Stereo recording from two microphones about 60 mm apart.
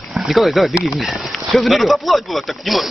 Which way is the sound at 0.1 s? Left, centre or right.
Centre.